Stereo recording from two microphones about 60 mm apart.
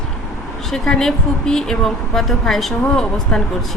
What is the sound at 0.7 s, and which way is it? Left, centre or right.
Speech, centre.